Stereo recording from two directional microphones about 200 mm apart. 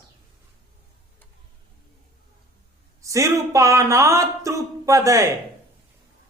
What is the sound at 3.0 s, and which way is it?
Speech, 15° right (ahead or behind).